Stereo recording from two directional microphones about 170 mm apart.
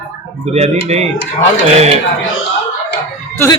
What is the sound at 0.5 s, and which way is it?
Speech, 40° right (ahead or behind).